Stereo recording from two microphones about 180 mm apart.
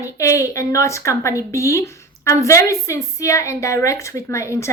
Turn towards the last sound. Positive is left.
turn(degrees=15)  # may be behind; listen again after turning